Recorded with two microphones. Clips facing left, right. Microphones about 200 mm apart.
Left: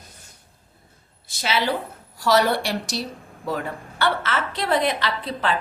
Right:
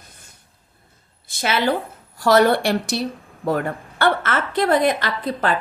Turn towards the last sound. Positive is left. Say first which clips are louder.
# right 3 dB
turn(degrees=-45)  # may be behind; listen again after turning